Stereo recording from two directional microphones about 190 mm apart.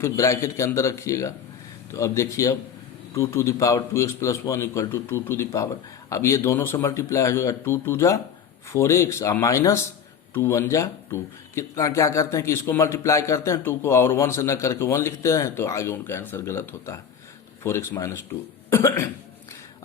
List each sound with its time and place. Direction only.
0.0 s speech: 15° left (ahead or behind)